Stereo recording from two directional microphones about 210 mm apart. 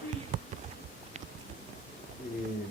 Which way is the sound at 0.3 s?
40° right (ahead or behind).